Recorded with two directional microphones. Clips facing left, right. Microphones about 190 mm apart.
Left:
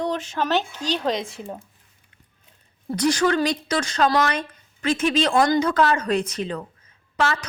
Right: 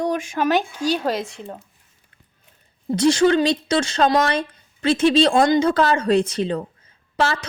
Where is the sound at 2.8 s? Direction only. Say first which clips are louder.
Right 4 dB; 25° right (ahead or behind).